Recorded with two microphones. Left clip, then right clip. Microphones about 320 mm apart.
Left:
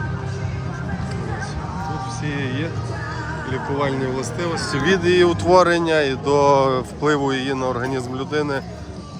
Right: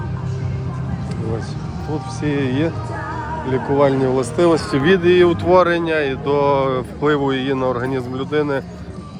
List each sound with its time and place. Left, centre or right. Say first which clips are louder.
2.2 s speech: right 9 dB; centre